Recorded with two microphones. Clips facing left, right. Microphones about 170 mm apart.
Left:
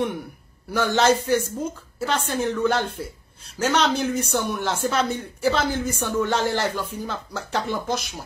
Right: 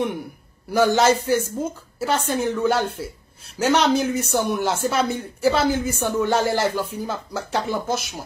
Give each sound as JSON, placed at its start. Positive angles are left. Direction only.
{"t": 0.7, "sound": "speech", "side_deg": -10}